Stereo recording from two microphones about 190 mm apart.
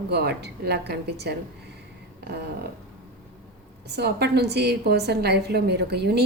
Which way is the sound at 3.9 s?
60° right (ahead or behind).